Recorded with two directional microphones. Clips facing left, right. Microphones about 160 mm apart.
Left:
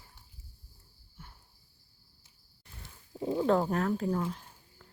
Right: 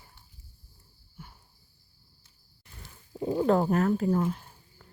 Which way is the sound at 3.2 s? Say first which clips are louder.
Right 3 dB; 15° right (ahead or behind).